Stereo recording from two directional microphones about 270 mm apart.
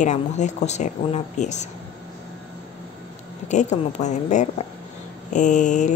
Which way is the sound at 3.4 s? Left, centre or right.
Left.